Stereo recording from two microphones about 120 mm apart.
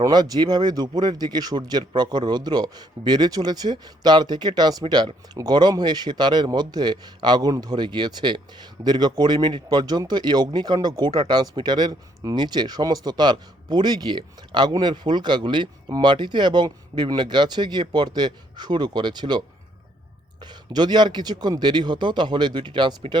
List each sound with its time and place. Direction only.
0.0 s speech: 35° right (ahead or behind)
1.8 s a man's voice: 45° right (ahead or behind)
2.0 s speech: 35° right (ahead or behind)
20.4 s speech: 35° right (ahead or behind)